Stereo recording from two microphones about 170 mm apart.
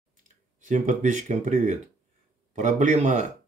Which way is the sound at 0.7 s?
45° right (ahead or behind).